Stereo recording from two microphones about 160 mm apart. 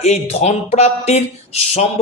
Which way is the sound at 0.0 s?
45° left (ahead or behind).